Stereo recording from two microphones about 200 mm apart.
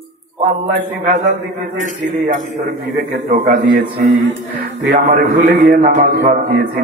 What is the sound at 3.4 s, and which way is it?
Speech, 35° right (ahead or behind).